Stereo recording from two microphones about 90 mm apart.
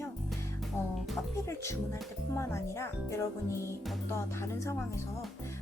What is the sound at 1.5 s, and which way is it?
Speech, 30° left (ahead or behind).